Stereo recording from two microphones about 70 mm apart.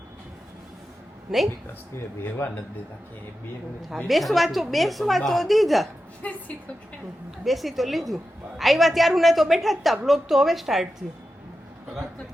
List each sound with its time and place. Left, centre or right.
2.4 s a man's voice: left
3.9 s a woman's voice: centre
7.3 s a woman's voice: centre